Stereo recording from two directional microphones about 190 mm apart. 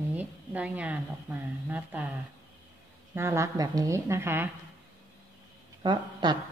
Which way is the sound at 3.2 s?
15° right (ahead or behind).